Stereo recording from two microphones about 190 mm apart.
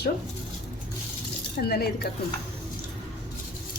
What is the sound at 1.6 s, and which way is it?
Speech, 55° left (ahead or behind).